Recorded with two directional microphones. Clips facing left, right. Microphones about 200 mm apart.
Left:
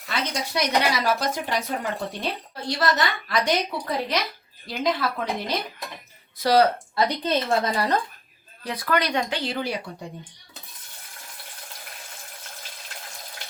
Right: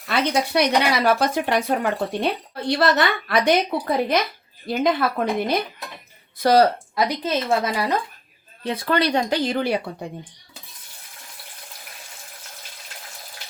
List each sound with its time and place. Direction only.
0.1 s a woman's voice: 60° right (ahead or behind); by 6.7 s 45° right (ahead or behind)
6.9 s speech: 10° right (ahead or behind)
8.6 s speech: 25° right (ahead or behind)
9.4 s a woman's voice: 50° right (ahead or behind)